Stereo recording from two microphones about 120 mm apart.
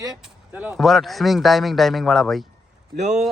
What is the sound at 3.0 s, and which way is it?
Speech, 75° right (ahead or behind).